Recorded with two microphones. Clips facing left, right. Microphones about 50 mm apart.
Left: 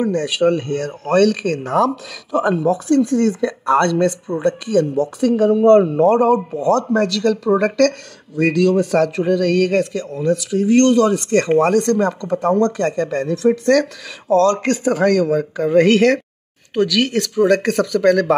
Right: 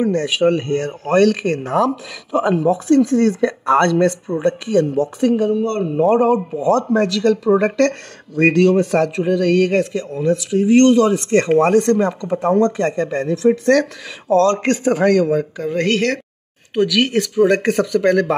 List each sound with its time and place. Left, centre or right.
0.0 s a man's voice: right
3.1 s speech: right
4.3 s speech: centre
4.6 s a man's voice: right
5.3 s speech: centre
5.6 s a man's voice: left
6.0 s a man's voice: right
8.4 s speech: right
9.1 s a man's voice: centre
15.5 s speech: centre
16.7 s a man's voice: centre